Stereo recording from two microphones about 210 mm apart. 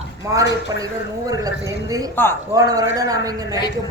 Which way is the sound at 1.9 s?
15° right (ahead or behind).